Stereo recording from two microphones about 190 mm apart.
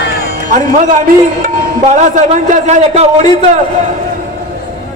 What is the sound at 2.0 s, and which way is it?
A man's voice, 40° right (ahead or behind).